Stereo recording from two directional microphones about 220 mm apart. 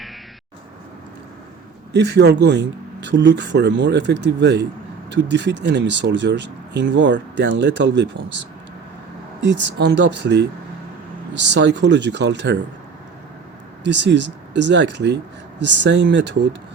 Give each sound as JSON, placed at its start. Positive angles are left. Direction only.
{"t": 1.9, "sound": "speech", "side_deg": -50}
{"t": 9.4, "sound": "speech", "side_deg": -55}
{"t": 13.8, "sound": "speech", "side_deg": -55}